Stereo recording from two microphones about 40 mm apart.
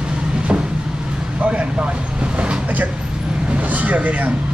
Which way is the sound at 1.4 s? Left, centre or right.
Right.